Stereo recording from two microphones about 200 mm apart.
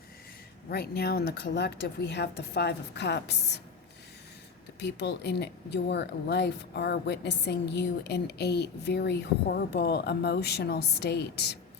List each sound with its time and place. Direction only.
0.7 s speech: 50° left (ahead or behind)
4.8 s speech: 55° left (ahead or behind)